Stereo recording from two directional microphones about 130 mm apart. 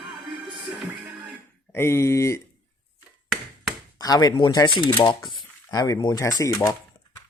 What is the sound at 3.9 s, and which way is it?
Speech, 30° left (ahead or behind).